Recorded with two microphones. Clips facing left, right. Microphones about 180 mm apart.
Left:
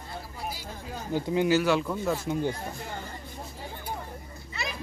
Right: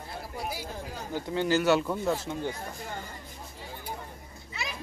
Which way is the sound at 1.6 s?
Centre (ahead or behind).